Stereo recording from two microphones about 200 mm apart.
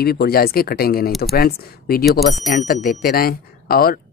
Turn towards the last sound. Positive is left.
turn(degrees=50)  # may be behind; listen again after turning